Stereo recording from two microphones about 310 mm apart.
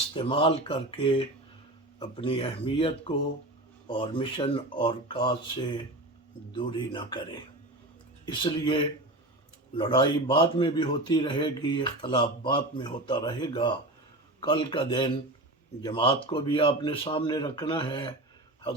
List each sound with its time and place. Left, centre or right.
0.1 s a man's voice: centre